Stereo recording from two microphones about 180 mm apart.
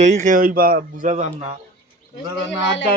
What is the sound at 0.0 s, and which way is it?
A man's voice, 40° right (ahead or behind).